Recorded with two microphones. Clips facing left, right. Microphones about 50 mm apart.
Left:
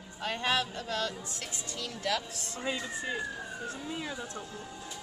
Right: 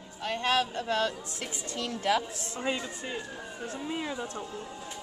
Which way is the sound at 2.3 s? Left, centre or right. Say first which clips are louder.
Right 3 dB; centre.